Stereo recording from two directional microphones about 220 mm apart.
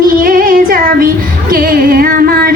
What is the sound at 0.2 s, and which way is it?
Female singing, 40° right (ahead or behind).